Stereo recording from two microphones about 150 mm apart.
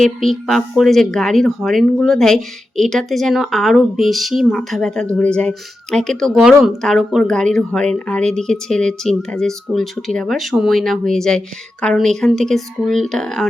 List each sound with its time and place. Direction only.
0.0 s speech: centre (ahead or behind)